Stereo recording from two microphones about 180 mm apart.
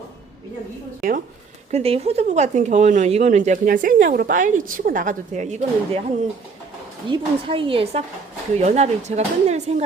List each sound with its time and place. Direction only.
1.7 s speech: 35° right (ahead or behind)
7.1 s speech: 30° right (ahead or behind)